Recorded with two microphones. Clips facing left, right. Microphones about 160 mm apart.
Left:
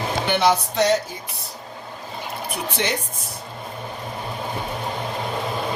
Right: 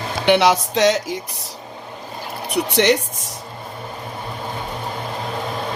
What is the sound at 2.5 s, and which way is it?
Speech, 75° right (ahead or behind).